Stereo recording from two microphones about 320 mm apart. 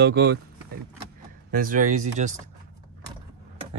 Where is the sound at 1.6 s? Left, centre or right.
Right.